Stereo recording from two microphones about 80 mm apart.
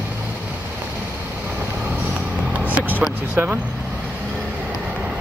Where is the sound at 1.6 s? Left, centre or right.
Centre.